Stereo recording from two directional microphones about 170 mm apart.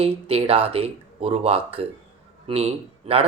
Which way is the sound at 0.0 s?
35° right (ahead or behind).